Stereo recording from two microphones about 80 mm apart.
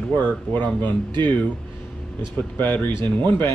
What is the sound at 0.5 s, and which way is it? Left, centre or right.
Speech, left.